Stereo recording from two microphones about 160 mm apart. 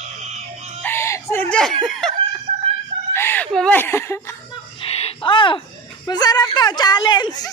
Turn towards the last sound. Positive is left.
turn(degrees=25)  # may be behind; listen again after turning